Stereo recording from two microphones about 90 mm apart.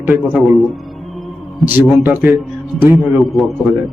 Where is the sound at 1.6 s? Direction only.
20° right (ahead or behind).